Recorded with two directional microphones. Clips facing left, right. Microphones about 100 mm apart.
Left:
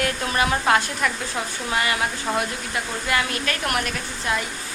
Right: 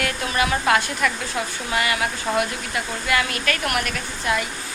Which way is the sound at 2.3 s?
20° left (ahead or behind).